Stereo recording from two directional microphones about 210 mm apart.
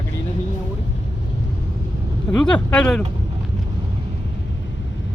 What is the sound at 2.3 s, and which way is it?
Speech, 5° left (ahead or behind).